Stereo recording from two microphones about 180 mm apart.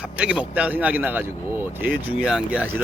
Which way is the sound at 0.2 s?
5° right (ahead or behind).